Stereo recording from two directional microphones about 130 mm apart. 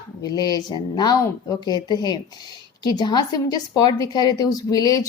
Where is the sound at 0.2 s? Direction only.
30° left (ahead or behind).